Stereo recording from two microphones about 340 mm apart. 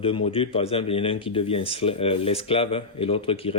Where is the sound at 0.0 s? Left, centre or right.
Centre.